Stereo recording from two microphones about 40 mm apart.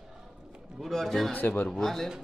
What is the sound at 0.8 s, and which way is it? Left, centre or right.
A man's voice, centre.